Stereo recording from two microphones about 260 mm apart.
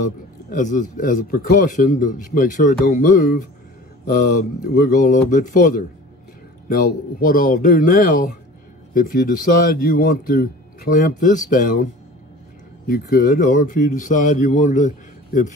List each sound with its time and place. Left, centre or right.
0.0 s speech: left